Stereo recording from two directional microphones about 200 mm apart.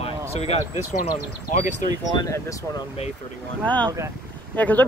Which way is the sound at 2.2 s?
15° left (ahead or behind).